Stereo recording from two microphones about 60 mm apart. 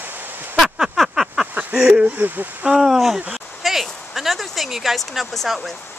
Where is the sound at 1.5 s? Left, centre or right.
Right.